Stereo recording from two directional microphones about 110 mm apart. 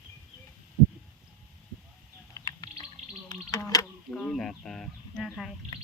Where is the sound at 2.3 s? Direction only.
35° left (ahead or behind).